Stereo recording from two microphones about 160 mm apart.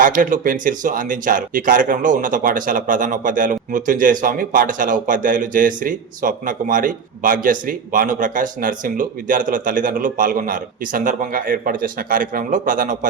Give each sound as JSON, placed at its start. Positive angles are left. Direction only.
{"t": 0.0, "sound": "speech", "side_deg": -55}